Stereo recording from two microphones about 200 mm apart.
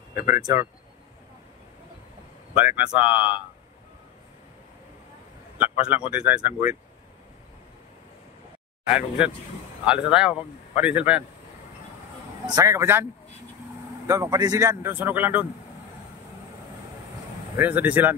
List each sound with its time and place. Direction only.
0.3 s speech: 15° right (ahead or behind)
2.5 s speech: 5° right (ahead or behind)
5.6 s speech: 5° right (ahead or behind)
8.8 s speech: 5° right (ahead or behind)
12.4 s speech: 15° right (ahead or behind)
14.0 s speech: 15° right (ahead or behind)
17.6 s speech: 10° right (ahead or behind)